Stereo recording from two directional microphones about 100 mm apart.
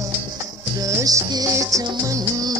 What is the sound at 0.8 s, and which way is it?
Music, 35° right (ahead or behind).